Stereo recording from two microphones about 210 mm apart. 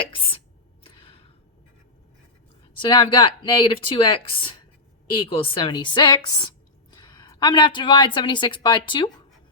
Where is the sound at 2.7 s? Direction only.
25° left (ahead or behind).